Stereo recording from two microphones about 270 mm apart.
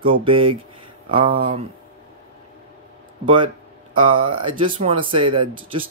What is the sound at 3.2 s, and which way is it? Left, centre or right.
Speech, centre.